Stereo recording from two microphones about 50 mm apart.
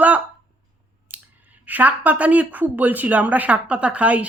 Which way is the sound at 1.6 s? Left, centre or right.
Right.